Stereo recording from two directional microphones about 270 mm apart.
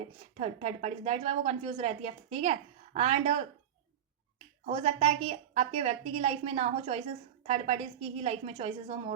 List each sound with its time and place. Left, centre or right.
0.0 s a woman's voice: right
4.6 s a woman's voice: right